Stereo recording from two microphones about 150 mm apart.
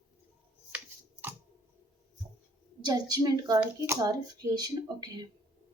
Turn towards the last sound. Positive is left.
turn(degrees=-25)  # may be behind; listen again after turning